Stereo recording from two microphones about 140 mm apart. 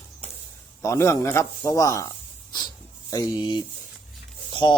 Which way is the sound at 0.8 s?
20° left (ahead or behind).